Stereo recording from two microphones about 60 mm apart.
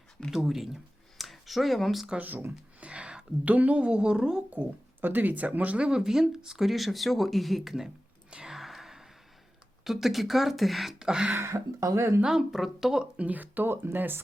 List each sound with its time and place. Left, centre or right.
0.3 s speech: centre
2.1 s speech: right
2.9 s speech: centre
4.5 s speech: right; by 7.9 s centre
8.3 s a sound: centre
9.8 s speech: centre
11.0 s speech: centre
11.3 s speech: right
12.2 s speech: centre
13.1 s speech: right